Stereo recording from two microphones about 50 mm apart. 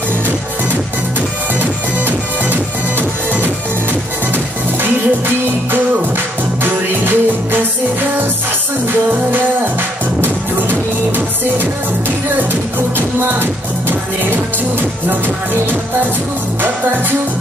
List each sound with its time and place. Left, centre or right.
1.6 s music: right
6.6 s music: right
10.2 s music: right
13.3 s music: right